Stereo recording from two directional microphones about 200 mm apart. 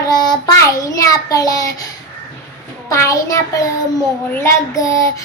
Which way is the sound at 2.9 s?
15° left (ahead or behind).